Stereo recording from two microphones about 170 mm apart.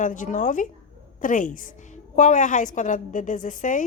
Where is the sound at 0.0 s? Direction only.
50° left (ahead or behind).